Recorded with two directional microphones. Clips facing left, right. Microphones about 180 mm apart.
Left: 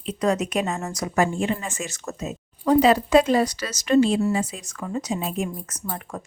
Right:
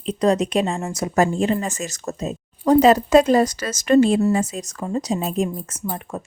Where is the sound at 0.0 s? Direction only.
35° right (ahead or behind).